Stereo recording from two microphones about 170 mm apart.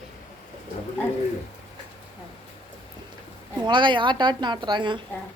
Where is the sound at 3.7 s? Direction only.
30° right (ahead or behind).